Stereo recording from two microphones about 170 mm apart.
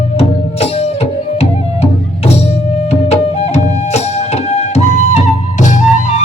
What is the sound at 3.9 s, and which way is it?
Music, 40° left (ahead or behind).